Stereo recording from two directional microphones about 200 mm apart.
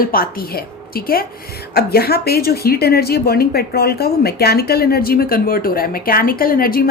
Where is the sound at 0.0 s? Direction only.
45° left (ahead or behind).